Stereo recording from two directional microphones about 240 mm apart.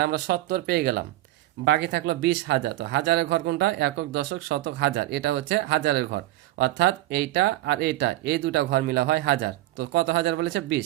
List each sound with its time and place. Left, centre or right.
0.0 s speech: right